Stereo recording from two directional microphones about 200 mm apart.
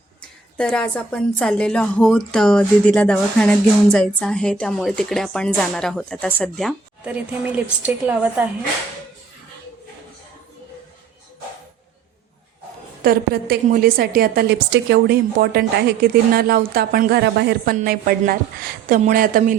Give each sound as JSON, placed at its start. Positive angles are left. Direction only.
{"t": 0.5, "sound": "speech", "side_deg": 5}
{"t": 13.0, "sound": "a woman's voice", "side_deg": -50}